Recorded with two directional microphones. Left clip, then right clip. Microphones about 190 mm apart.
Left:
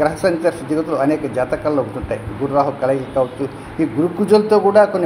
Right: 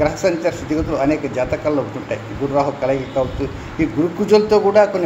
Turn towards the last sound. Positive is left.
turn(degrees=20)  # may be behind; listen again after turning